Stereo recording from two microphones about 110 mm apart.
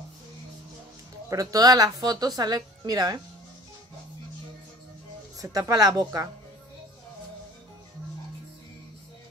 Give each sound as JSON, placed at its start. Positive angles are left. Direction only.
{"t": 1.3, "sound": "speech", "side_deg": -30}
{"t": 5.4, "sound": "speech", "side_deg": -30}